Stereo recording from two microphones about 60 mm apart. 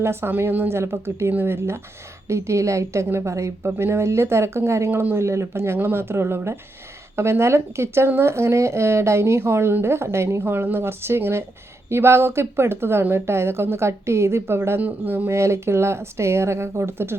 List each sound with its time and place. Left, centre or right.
0.0 s speech: right
14.8 s speech: right
15.3 s speech: right